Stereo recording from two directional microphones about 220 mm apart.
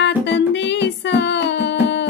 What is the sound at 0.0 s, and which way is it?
Music, 50° left (ahead or behind).